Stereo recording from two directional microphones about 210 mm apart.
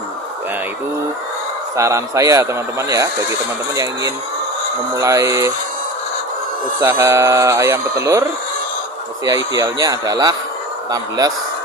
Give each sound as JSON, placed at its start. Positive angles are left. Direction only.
{"t": 1.7, "sound": "speech", "side_deg": -15}
{"t": 4.9, "sound": "speech", "side_deg": -15}
{"t": 6.7, "sound": "speech", "side_deg": -15}
{"t": 9.2, "sound": "speech", "side_deg": -15}